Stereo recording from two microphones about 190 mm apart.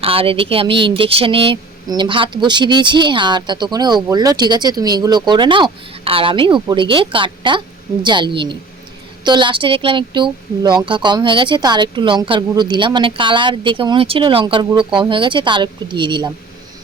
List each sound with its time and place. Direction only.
0.0 s speech: 30° right (ahead or behind)